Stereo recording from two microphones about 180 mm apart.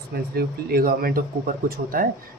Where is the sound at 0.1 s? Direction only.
60° right (ahead or behind).